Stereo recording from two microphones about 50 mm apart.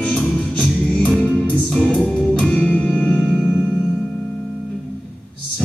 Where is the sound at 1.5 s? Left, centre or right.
Centre.